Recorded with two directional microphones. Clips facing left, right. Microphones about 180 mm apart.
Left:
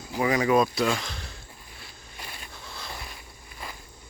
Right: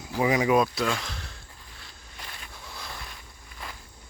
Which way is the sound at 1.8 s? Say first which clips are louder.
Left 2 dB; 10° left (ahead or behind).